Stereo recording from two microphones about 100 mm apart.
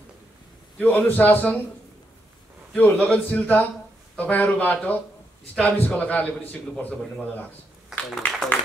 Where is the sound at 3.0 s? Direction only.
15° left (ahead or behind).